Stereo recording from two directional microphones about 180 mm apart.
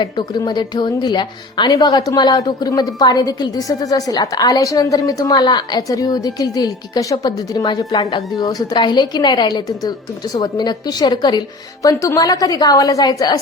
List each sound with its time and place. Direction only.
0.0 s a woman's voice: 25° left (ahead or behind)